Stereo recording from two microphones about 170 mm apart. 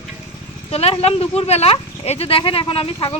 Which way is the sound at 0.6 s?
35° left (ahead or behind).